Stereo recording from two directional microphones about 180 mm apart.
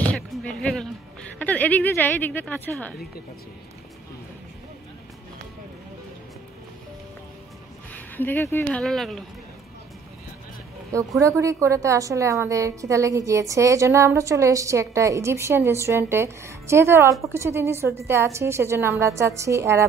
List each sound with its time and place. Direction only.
0.0 s music: 5° left (ahead or behind)
1.4 s a woman's voice: 10° left (ahead or behind)
7.9 s speech: 10° left (ahead or behind)
8.8 s speech: centre (ahead or behind)
11.1 s a woman's voice: 15° right (ahead or behind)